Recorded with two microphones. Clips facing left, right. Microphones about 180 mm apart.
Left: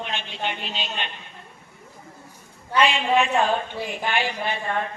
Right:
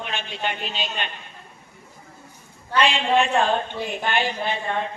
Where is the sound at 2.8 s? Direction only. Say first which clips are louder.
Even; 5° left (ahead or behind).